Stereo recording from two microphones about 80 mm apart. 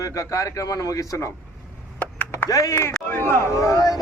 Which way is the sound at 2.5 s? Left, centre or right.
Left.